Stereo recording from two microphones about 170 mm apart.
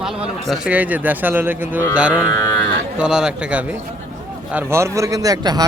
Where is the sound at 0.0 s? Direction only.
5° right (ahead or behind).